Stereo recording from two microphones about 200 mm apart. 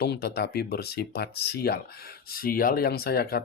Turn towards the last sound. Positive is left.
turn(degrees=50)  # may be behind; listen again after turning